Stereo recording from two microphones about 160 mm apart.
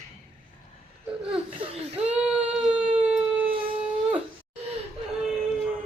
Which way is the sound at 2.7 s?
35° right (ahead or behind).